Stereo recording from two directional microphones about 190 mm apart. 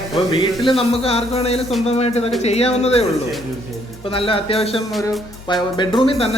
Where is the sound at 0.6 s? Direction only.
30° left (ahead or behind).